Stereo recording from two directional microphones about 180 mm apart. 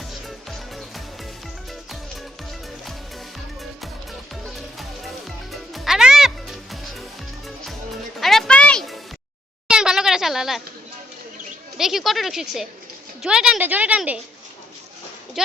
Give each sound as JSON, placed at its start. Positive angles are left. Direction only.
{"t": 0.1, "sound": "music", "side_deg": 0}
{"t": 4.4, "sound": "music", "side_deg": 0}
{"t": 9.6, "sound": "a sound", "side_deg": -5}
{"t": 11.8, "sound": "a woman's voice", "side_deg": 0}